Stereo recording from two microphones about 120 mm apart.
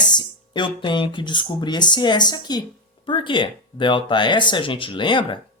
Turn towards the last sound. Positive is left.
turn(degrees=40)  # may be behind; listen again after turning